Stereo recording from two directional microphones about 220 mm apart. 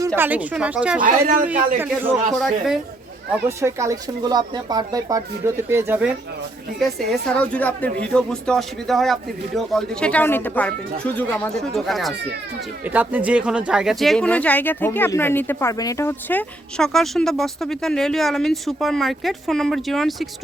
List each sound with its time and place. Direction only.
0.2 s speech: 5° right (ahead or behind)
1.0 s speech: 40° right (ahead or behind)
1.8 s speech: 10° right (ahead or behind)
2.3 s speech: centre (ahead or behind)
3.6 s speech: 15° right (ahead or behind)
6.7 s speech: centre (ahead or behind)